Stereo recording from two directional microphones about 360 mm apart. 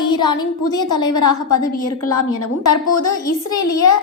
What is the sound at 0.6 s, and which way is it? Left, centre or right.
Speech, left.